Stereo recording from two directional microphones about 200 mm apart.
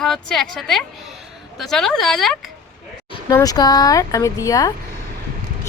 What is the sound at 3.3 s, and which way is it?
Speech, 20° left (ahead or behind).